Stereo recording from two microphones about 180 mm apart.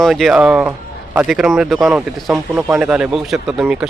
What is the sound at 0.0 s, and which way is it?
Speech, centre (ahead or behind).